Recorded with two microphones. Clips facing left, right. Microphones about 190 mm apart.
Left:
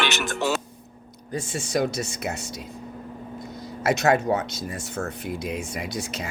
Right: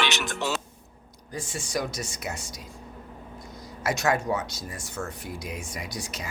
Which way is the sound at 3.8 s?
20° left (ahead or behind).